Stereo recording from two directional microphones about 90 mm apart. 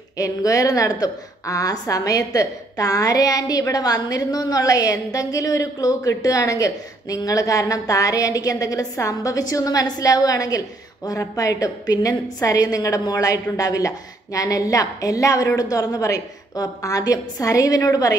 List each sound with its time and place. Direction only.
0.2 s a woman's voice: 40° left (ahead or behind)